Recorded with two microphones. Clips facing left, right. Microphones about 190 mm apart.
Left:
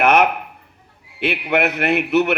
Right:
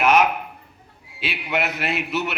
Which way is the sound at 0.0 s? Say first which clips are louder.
Left 3 dB; 60° left (ahead or behind).